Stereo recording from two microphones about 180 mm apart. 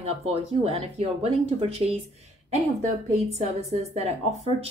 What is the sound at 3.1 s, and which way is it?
Speech, 40° right (ahead or behind).